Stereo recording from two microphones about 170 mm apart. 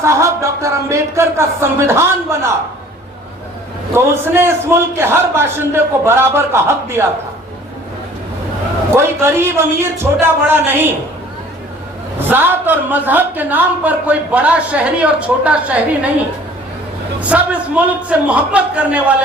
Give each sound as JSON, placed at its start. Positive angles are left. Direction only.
{"t": 0.0, "sound": "speech", "side_deg": -15}
{"t": 3.9, "sound": "speech", "side_deg": -15}
{"t": 9.0, "sound": "speech", "side_deg": -15}
{"t": 12.3, "sound": "speech", "side_deg": -10}
{"t": 17.2, "sound": "speech", "side_deg": -10}